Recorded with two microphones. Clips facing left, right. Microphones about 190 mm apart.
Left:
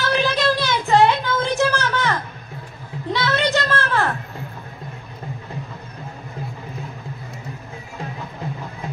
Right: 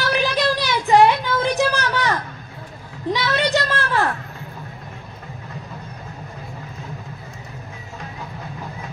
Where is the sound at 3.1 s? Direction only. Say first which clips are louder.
Even; 15° right (ahead or behind).